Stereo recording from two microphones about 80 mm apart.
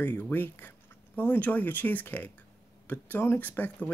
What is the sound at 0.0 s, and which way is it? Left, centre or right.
Speech, left.